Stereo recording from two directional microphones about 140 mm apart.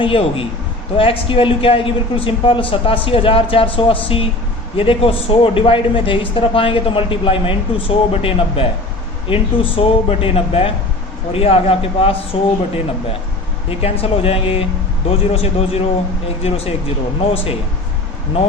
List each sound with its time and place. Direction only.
0.0 s a man's voice: 40° left (ahead or behind)